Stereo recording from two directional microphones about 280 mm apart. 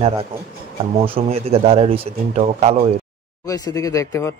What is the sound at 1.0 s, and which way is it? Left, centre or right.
Speech, right.